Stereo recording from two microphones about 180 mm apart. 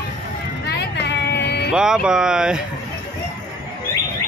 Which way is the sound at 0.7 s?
70° left (ahead or behind).